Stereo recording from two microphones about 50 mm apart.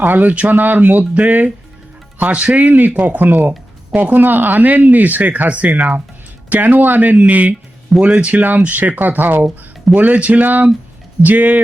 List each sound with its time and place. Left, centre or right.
0.0 s speech: right